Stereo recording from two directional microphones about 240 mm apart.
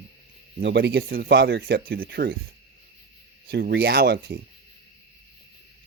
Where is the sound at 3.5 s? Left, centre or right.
Right.